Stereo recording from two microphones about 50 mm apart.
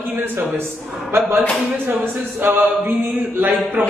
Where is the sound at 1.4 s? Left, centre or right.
Right.